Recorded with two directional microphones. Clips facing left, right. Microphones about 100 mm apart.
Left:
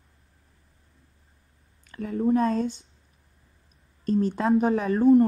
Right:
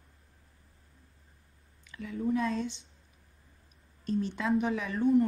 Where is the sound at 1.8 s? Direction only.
45° left (ahead or behind).